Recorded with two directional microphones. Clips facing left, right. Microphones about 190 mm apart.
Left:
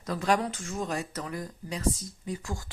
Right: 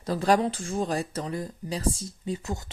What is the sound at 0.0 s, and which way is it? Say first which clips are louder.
Speech: right 4 dB; 35° right (ahead or behind).